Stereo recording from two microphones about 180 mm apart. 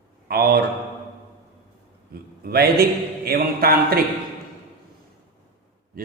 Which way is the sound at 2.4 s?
60° right (ahead or behind).